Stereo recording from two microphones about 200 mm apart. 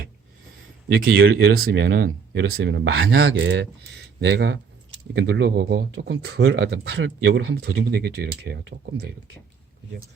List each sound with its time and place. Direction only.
0.9 s speech: 50° right (ahead or behind)